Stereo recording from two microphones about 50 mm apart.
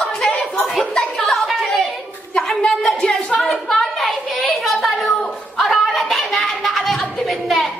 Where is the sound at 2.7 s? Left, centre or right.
Centre.